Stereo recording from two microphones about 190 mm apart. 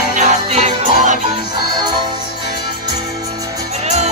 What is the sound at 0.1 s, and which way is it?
Music, 40° right (ahead or behind).